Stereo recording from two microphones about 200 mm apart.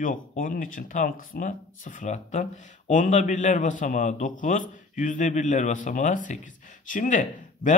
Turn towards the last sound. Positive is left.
turn(degrees=40)  # may be behind; listen again after turning